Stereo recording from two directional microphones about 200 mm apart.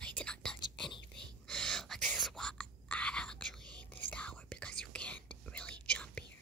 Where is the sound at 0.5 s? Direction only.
25° left (ahead or behind).